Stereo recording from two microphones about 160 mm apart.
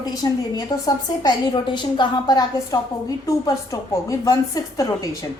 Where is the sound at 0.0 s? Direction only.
25° left (ahead or behind).